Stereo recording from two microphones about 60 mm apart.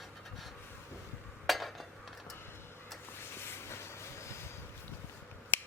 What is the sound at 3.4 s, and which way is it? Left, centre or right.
Vehicle, left.